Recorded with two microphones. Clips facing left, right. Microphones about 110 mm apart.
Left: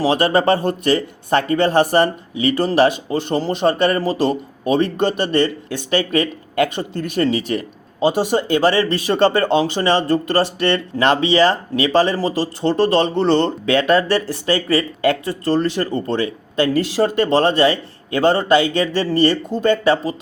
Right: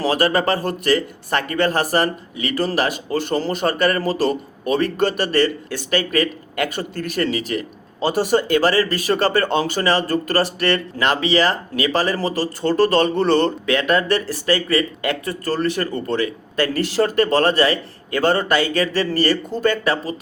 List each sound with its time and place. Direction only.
0.0 s speech: 25° left (ahead or behind)